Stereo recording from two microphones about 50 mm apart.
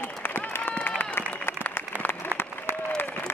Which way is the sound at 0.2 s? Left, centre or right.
Left.